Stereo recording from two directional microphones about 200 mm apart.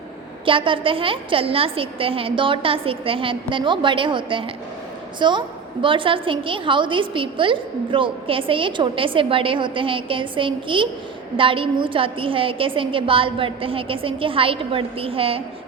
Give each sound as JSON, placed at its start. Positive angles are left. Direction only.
{"t": 0.4, "sound": "a woman's voice", "side_deg": -25}